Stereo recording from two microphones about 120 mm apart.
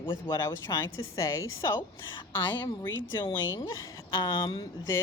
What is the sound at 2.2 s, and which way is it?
A woman's voice, 35° left (ahead or behind).